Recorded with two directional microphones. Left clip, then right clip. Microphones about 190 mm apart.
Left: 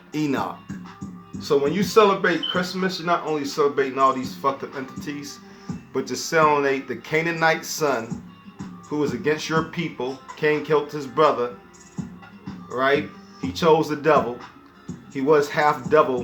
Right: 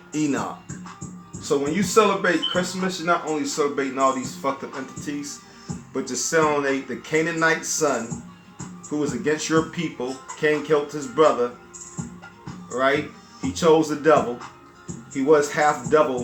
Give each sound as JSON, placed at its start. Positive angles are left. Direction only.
{"t": 0.1, "sound": "speech", "side_deg": 40}
{"t": 12.7, "sound": "speech", "side_deg": 45}